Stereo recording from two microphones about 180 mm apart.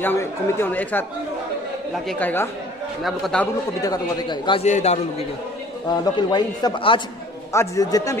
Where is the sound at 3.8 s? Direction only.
20° left (ahead or behind).